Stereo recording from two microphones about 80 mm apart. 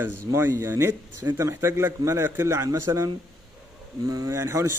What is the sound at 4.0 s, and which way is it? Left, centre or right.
Speech, right.